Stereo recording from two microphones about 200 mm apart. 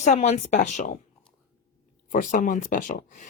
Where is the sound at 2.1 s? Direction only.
40° left (ahead or behind).